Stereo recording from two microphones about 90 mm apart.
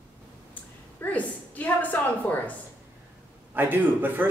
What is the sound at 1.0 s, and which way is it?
A woman's voice, 20° left (ahead or behind).